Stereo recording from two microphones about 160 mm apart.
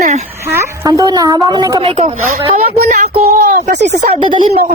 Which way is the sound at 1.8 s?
40° right (ahead or behind).